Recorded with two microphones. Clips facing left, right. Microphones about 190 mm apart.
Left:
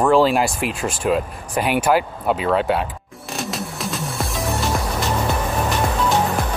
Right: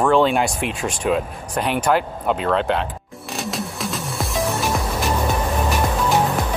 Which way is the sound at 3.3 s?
Centre (ahead or behind).